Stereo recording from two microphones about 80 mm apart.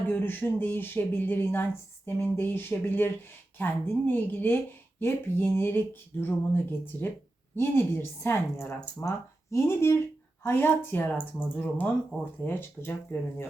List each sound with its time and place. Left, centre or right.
0.1 s a woman's voice: left